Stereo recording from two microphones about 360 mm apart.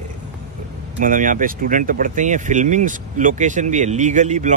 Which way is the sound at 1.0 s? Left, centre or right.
Right.